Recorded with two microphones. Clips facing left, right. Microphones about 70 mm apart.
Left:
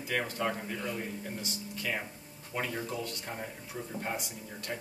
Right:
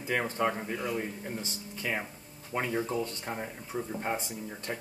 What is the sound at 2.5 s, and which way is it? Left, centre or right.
Speech, right.